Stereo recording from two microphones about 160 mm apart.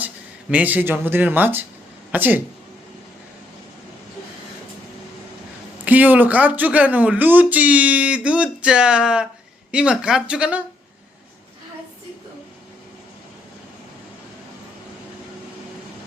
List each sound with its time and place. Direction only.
0.5 s speech: 10° right (ahead or behind)
5.8 s speech: 10° right (ahead or behind)